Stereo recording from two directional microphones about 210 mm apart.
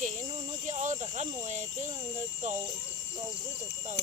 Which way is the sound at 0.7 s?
35° right (ahead or behind).